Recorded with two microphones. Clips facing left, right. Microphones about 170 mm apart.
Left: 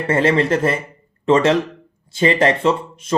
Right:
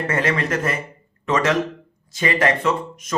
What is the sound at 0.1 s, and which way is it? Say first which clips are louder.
Speech: left 8 dB; 30° left (ahead or behind).